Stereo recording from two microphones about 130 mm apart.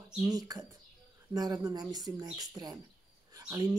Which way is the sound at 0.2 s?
30° right (ahead or behind).